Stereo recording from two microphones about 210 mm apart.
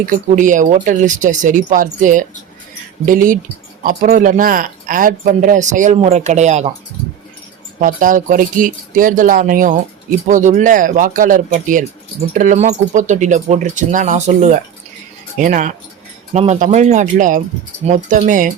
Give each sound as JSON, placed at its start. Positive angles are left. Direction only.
{"t": 0.0, "sound": "speech", "side_deg": -40}
{"t": 7.8, "sound": "speech", "side_deg": -40}